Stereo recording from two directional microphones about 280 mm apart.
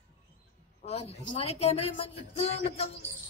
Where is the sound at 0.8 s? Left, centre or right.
Left.